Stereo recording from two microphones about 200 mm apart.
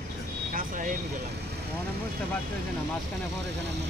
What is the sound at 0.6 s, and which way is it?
Vehicle, 40° right (ahead or behind).